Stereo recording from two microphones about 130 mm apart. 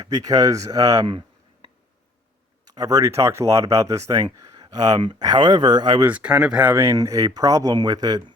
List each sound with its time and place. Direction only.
0.0 s speech: 30° right (ahead or behind)
2.6 s speech: 30° right (ahead or behind)
6.0 s speech: 10° right (ahead or behind); by 8.2 s 30° right (ahead or behind)